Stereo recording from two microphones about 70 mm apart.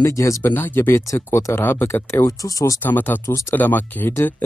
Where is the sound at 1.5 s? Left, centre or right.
Left.